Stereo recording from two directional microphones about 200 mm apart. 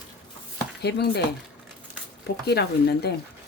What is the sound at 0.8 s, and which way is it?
Speech, 55° left (ahead or behind).